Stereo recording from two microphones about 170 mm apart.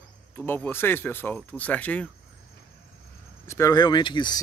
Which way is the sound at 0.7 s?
15° left (ahead or behind).